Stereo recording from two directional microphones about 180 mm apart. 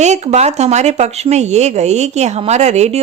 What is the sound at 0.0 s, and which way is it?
Speech, 40° right (ahead or behind).